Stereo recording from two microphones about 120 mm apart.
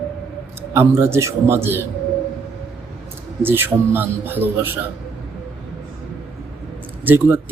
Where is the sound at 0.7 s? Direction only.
20° right (ahead or behind).